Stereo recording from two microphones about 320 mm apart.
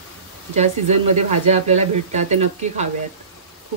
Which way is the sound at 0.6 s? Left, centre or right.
Right.